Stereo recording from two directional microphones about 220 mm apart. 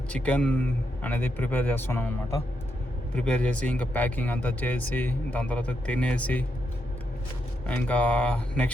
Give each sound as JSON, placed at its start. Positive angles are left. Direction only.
{"t": 0.1, "sound": "a man's voice", "side_deg": 5}
{"t": 3.2, "sound": "a man's voice", "side_deg": 5}
{"t": 7.7, "sound": "speech", "side_deg": 5}